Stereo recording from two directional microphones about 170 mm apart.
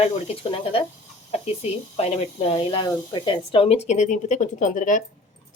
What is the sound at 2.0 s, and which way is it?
Speech, 35° left (ahead or behind).